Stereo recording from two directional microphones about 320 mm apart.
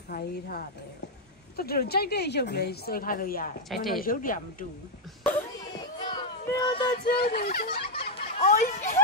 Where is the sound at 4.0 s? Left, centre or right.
Left.